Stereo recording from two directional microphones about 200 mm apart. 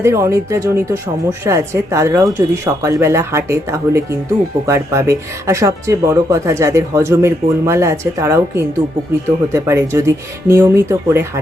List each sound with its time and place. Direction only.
0.0 s speech: 15° right (ahead or behind)